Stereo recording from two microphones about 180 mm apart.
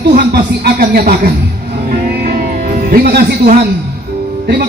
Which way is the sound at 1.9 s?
50° right (ahead or behind).